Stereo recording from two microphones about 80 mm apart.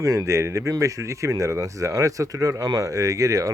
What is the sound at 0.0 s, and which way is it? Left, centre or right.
Speech, right.